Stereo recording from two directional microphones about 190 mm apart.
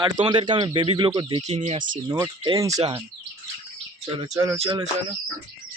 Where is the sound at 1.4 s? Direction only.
35° right (ahead or behind); by 3.0 s 20° right (ahead or behind).